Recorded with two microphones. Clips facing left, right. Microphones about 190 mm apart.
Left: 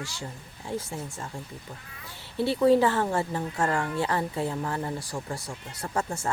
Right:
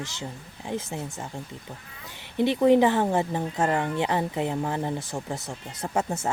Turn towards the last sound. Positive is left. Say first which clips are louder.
# right 3 dB
turn(degrees=-20)  # may be behind; listen again after turning